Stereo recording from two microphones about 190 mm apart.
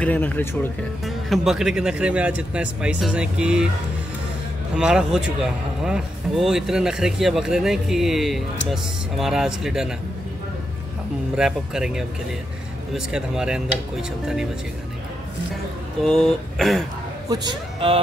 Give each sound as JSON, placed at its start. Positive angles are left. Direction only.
{"t": 0.0, "sound": "speech", "side_deg": 10}
{"t": 1.0, "sound": "speech", "side_deg": 0}
{"t": 4.7, "sound": "speech", "side_deg": -5}
{"t": 11.3, "sound": "speech", "side_deg": -5}
{"t": 16.0, "sound": "speech", "side_deg": 5}
{"t": 17.3, "sound": "speech", "side_deg": -20}